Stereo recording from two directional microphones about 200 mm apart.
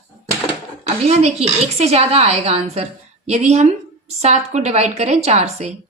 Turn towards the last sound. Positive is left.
turn(degrees=-30)  # may be behind; listen again after turning